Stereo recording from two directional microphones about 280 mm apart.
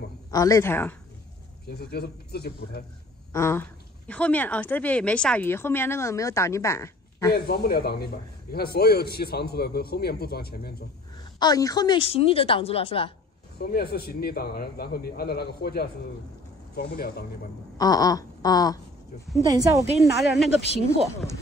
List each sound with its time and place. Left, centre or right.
0.3 s a woman's voice: centre
1.7 s a man's voice: left
3.3 s a woman's voice: centre
7.3 s a man's voice: left
11.3 s a woman's voice: centre
13.6 s a man's voice: left
17.7 s a woman's voice: centre
19.4 s a woman's voice: centre
20.0 s speech: centre